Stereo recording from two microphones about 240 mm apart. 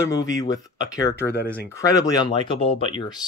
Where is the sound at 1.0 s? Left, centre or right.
Left.